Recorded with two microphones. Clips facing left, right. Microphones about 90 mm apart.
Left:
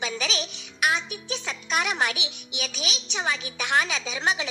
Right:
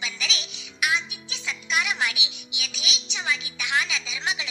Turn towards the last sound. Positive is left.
turn(degrees=45)  # may be behind; listen again after turning